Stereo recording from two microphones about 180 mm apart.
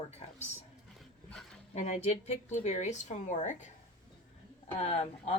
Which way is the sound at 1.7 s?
40° left (ahead or behind).